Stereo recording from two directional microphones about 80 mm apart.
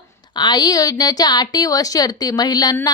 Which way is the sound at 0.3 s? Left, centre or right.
Left.